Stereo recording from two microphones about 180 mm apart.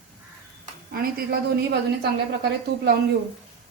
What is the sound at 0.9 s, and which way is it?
Speech, 55° right (ahead or behind).